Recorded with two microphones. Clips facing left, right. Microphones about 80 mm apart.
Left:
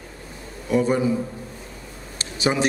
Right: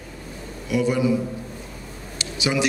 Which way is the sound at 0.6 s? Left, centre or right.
Left.